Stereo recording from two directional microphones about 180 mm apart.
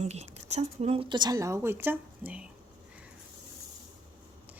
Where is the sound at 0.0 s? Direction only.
40° right (ahead or behind); by 2.4 s 10° right (ahead or behind).